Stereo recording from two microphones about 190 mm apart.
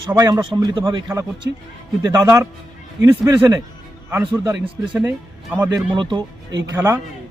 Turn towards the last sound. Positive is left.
turn(degrees=-10)  # may be behind; listen again after turning